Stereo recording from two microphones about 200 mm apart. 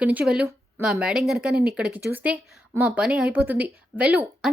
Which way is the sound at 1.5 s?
50° right (ahead or behind).